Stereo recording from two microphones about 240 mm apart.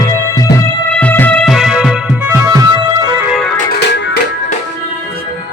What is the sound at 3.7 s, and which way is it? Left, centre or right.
Music, left.